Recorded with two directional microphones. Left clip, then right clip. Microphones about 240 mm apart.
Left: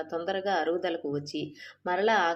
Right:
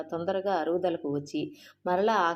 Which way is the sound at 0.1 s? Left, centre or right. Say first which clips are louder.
Right 1 dB; centre.